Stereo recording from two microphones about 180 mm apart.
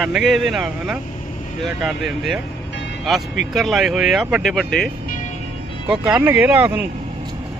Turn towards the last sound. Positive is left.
turn(degrees=-10)  # may be behind; listen again after turning